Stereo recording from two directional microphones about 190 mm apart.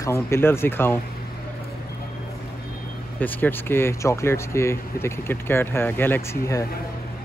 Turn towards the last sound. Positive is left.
turn(degrees=15)  # may be behind; listen again after turning